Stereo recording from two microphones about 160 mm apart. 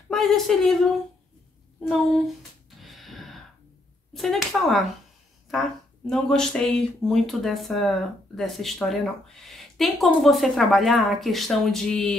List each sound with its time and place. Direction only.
0.1 s speech: centre (ahead or behind)
1.9 s speech: centre (ahead or behind)
2.8 s gasp: centre (ahead or behind)
4.1 s speech: centre (ahead or behind)